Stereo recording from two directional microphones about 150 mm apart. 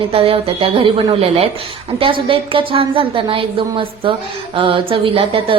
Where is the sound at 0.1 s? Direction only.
40° right (ahead or behind).